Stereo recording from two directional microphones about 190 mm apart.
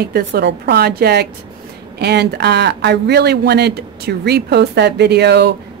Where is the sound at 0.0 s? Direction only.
60° right (ahead or behind).